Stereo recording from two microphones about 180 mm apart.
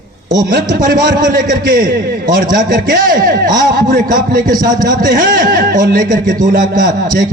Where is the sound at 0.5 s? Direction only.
55° right (ahead or behind).